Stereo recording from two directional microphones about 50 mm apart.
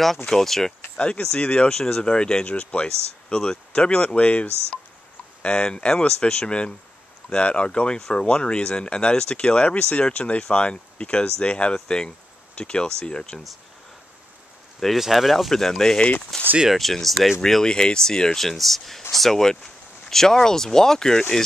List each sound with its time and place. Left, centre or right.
0.3 s speech: centre
0.9 s speech: left
14.8 s speech: centre